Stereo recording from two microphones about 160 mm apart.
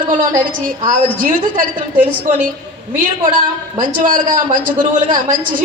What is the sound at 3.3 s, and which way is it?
A man's voice, 55° right (ahead or behind).